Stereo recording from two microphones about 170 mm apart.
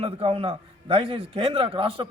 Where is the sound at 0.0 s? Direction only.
35° right (ahead or behind).